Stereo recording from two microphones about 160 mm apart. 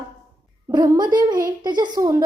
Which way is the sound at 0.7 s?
25° right (ahead or behind).